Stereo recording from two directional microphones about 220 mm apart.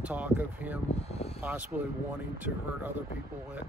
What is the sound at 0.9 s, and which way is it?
Speech, 30° left (ahead or behind).